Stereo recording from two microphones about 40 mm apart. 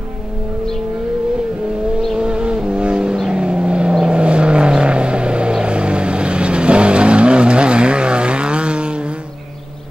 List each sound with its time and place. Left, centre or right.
2.1 s vehicle: right